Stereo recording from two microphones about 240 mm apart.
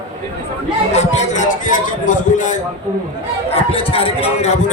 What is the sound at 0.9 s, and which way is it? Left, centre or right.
A man's voice, left.